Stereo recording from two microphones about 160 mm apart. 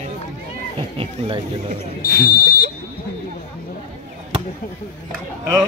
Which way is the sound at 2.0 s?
70° left (ahead or behind).